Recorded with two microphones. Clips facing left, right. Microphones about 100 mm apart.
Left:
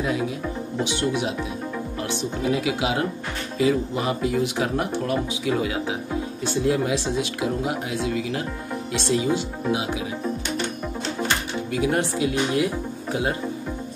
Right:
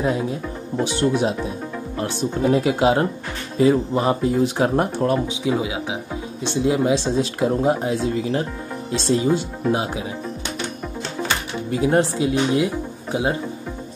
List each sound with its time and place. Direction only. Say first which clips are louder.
0.0 s speech: right 3 dB; 35° right (ahead or behind)
5.4 s speech: right 2 dB; 20° right (ahead or behind); by 10.0 s 40° right (ahead or behind)
11.7 s speech: right 5 dB; 30° right (ahead or behind)